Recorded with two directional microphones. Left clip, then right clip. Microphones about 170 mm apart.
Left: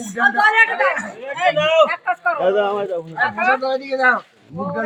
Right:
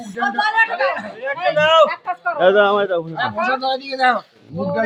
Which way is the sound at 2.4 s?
25° right (ahead or behind).